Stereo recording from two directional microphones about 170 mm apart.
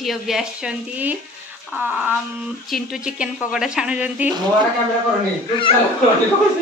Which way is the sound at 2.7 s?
5° right (ahead or behind).